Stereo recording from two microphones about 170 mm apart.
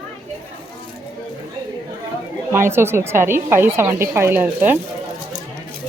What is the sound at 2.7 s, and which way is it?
A woman's voice, 15° right (ahead or behind).